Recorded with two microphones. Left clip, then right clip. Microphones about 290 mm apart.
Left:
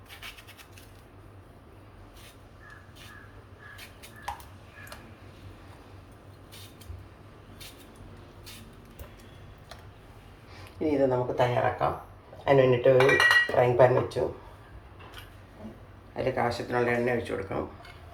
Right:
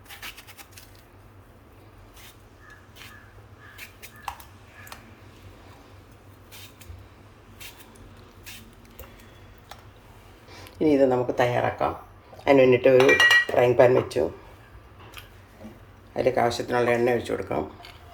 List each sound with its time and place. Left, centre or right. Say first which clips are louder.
0.2 s a sound: right 4 dB; centre
10.5 s speech: right 7 dB; right
12.5 s speech: right 4 dB; right
16.1 s speech: right 6 dB; right